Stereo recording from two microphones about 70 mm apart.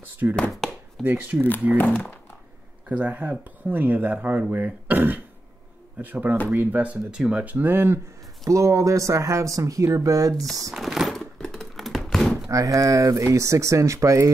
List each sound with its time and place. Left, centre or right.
0.5 s chopping: centre
1.0 s speech: right
1.8 s speech: left
2.9 s speech: centre
8.5 s speech: right
10.7 s a sound: centre
12.4 s speech: right